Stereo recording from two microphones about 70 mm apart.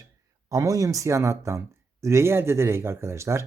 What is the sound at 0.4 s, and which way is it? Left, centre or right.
Speech, right.